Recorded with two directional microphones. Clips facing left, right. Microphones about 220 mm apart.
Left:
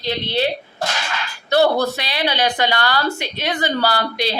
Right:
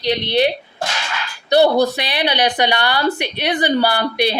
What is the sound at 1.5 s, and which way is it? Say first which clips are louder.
A woman's voice: right 3 dB; 15° right (ahead or behind).